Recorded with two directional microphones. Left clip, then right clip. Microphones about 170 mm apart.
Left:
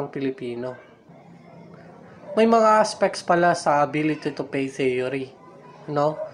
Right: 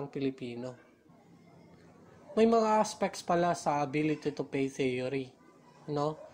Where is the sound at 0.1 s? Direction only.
35° right (ahead or behind).